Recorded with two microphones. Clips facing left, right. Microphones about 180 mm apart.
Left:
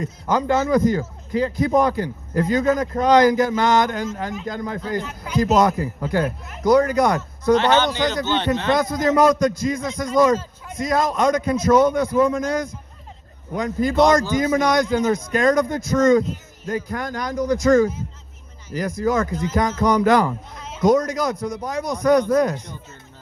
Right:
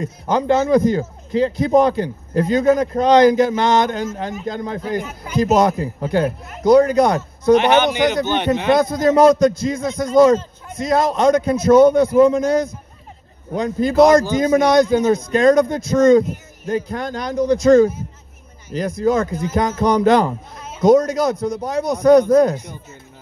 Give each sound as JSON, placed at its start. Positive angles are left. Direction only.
{"t": 0.0, "sound": "a man's voice", "side_deg": -25}
{"t": 8.7, "sound": "a man's voice", "side_deg": -25}